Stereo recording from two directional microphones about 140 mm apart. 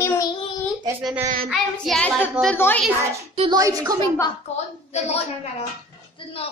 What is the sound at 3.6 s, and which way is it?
Speech, 25° right (ahead or behind).